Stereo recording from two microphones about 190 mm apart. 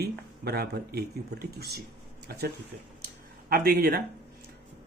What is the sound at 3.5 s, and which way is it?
Speech, 55° right (ahead or behind).